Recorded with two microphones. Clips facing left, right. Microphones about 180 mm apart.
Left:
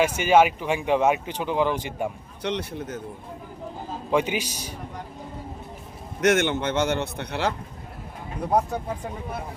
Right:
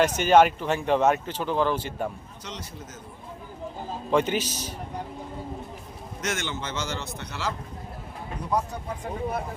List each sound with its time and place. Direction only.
0.0 s speech: 10° left (ahead or behind)
2.4 s a man's voice: 65° left (ahead or behind)
4.1 s speech: 10° left (ahead or behind)
6.2 s a man's voice: 60° left (ahead or behind)